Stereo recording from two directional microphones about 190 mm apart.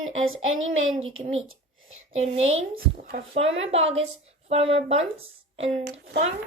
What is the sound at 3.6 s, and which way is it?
Speech, 35° right (ahead or behind).